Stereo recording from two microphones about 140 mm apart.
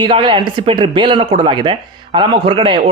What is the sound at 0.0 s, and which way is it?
A man's voice, 35° right (ahead or behind).